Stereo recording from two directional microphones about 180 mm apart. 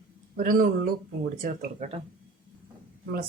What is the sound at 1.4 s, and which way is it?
Speech, 40° right (ahead or behind).